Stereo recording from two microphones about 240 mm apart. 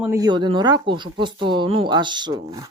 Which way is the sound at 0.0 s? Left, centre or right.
Centre.